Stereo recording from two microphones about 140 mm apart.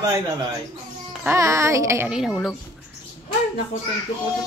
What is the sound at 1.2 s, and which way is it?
Speech, 20° right (ahead or behind).